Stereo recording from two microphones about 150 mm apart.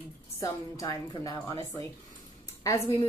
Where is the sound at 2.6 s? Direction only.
25° left (ahead or behind).